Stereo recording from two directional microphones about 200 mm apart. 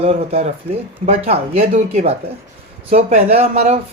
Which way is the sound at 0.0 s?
30° right (ahead or behind).